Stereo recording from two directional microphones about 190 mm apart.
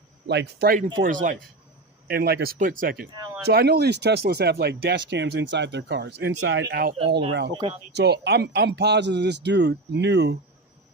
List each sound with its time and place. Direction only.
0.3 s speech: 60° right (ahead or behind)
1.0 s speech: 45° right (ahead or behind)
2.0 s speech: 55° right (ahead or behind)
7.5 s speech: 25° right (ahead or behind)
7.9 s speech: 60° right (ahead or behind)